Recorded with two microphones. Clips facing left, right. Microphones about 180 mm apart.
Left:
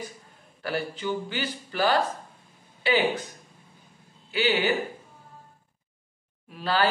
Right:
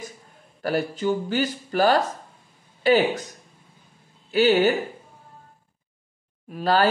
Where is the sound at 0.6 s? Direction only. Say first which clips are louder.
Right 6 dB; 40° right (ahead or behind).